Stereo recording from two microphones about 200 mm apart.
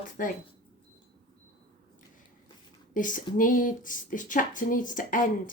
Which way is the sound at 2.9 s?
40° left (ahead or behind).